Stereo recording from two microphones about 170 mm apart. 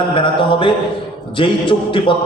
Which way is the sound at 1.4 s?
30° left (ahead or behind).